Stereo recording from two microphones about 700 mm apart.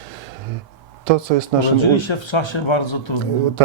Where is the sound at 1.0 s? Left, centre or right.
Right.